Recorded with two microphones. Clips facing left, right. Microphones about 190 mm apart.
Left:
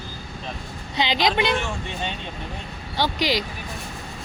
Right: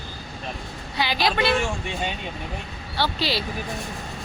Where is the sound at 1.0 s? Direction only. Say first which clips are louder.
Left 2 dB; 20° left (ahead or behind).